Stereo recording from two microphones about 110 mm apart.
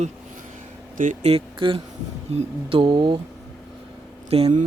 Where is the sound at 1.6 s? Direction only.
50° right (ahead or behind).